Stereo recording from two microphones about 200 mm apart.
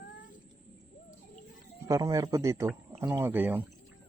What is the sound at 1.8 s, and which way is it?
A man's voice, 15° right (ahead or behind).